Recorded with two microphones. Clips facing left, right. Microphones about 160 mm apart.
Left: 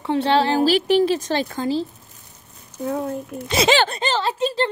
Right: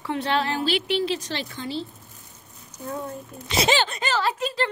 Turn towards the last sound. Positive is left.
turn(degrees=30)  # may be behind; listen again after turning